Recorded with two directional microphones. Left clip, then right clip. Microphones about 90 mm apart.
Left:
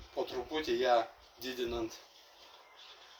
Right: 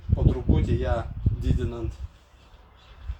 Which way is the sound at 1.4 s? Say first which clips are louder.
Right 3 dB; 15° right (ahead or behind).